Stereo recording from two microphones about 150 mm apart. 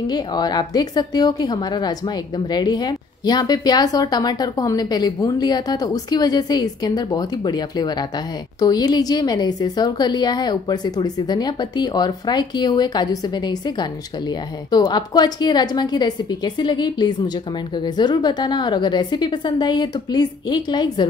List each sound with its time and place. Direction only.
0.1 s a woman's voice: 25° left (ahead or behind)